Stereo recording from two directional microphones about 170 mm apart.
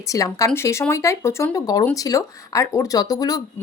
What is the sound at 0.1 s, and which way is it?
Speech, 20° left (ahead or behind).